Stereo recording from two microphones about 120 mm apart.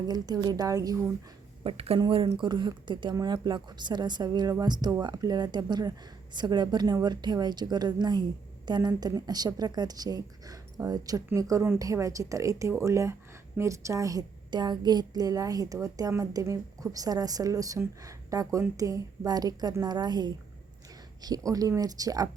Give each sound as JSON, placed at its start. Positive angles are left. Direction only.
{"t": 0.4, "sound": "a woman's voice", "side_deg": -30}
{"t": 1.6, "sound": "a woman's voice", "side_deg": -55}